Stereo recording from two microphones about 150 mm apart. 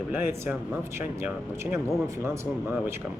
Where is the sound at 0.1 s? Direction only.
15° right (ahead or behind).